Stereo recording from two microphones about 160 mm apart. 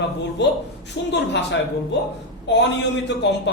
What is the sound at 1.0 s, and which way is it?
Speech, 90° left.